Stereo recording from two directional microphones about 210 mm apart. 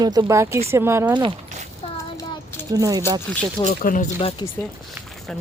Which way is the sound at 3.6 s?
35° left (ahead or behind).